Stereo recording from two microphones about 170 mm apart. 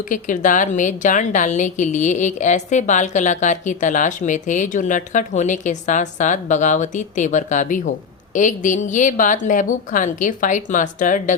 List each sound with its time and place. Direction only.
0.1 s a woman's voice: 50° left (ahead or behind)